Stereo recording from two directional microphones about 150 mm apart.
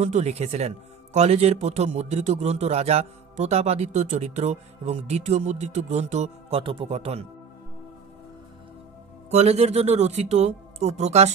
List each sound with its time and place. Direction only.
0.0 s a man's voice: 50° right (ahead or behind)
9.3 s a man's voice: 45° right (ahead or behind)